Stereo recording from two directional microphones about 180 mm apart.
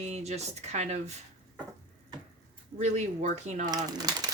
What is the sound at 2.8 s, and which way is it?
Speech, 40° right (ahead or behind).